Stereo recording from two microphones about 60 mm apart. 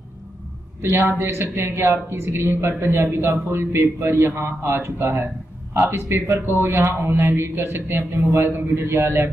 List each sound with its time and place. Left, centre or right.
1.1 s a man's voice: right